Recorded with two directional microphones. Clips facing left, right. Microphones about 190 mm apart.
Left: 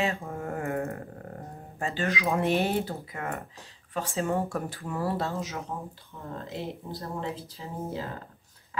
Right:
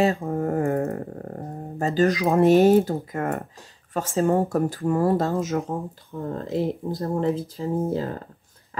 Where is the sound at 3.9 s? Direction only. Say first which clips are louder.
Right 7 dB; 45° right (ahead or behind).